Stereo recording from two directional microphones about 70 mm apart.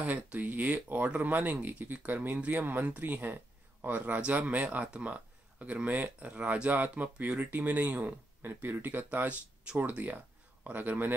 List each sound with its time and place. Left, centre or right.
0.0 s speech: right